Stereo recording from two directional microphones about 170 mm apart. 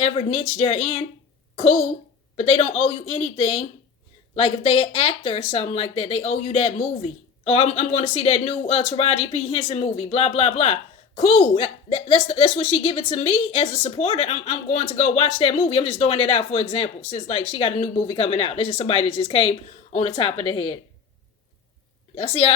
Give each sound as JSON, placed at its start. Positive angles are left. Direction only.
{"t": 0.0, "sound": "speech", "side_deg": 40}
{"t": 22.1, "sound": "a woman's voice", "side_deg": 35}